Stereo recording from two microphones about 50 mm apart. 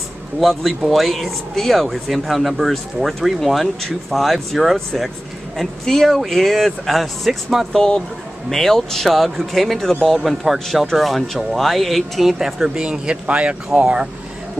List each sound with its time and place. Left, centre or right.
0.4 s speech: centre
7.7 s speech: centre; by 14.0 s right